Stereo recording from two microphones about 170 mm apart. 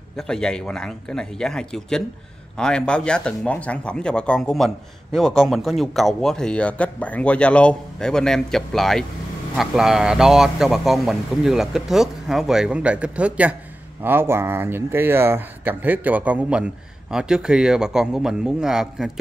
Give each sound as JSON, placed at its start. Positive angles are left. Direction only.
{"t": 0.1, "sound": "speech", "side_deg": 5}